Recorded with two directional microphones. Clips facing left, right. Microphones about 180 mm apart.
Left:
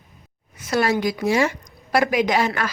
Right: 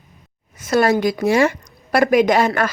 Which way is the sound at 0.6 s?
45° right (ahead or behind).